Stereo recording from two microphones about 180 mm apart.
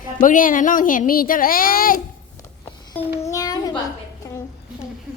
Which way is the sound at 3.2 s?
20° left (ahead or behind).